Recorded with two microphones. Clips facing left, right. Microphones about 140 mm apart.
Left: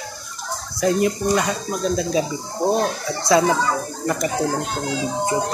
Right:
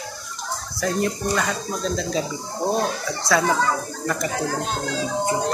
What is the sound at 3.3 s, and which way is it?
Speech, 20° left (ahead or behind).